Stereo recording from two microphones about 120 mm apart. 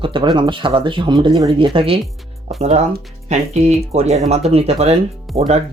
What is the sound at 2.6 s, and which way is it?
Speech, 60° right (ahead or behind).